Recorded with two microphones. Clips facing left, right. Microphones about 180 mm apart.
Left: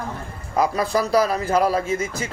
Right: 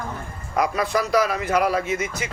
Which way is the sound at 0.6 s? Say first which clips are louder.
Left 2 dB; 30° left (ahead or behind).